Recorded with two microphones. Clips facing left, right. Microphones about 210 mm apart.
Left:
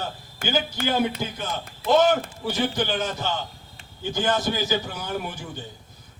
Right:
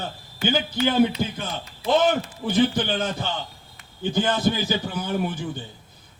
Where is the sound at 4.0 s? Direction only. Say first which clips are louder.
Right 2 dB; 55° right (ahead or behind).